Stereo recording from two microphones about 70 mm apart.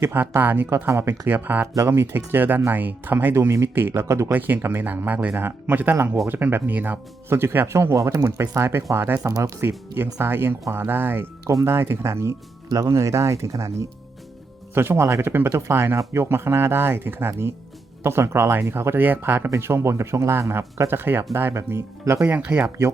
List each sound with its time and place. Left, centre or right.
0.0 s speech: right
4.3 s speech: right
7.3 s speech: right
9.2 s speech: right
12.6 s speech: right
14.8 s speech: right
15.4 s speech: right
22.3 s speech: right